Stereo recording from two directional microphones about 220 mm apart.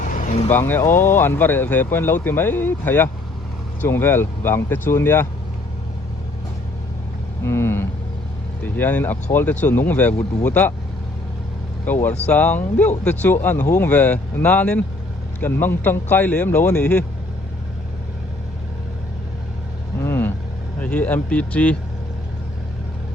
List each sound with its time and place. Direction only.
0.1 s vehicle: 35° left (ahead or behind)
0.5 s speech: 10° left (ahead or behind)
7.4 s vehicle: 10° left (ahead or behind)
8.6 s speech: 10° left (ahead or behind)
11.9 s speech: 10° left (ahead or behind)
20.0 s vehicle: 10° left (ahead or behind)
20.8 s speech: 5° left (ahead or behind)